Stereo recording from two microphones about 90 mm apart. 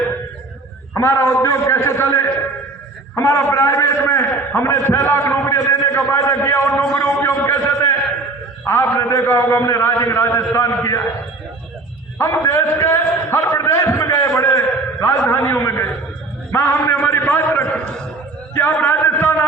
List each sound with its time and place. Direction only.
0.9 s a man's voice: 35° left (ahead or behind)
12.2 s a man's voice: 30° left (ahead or behind)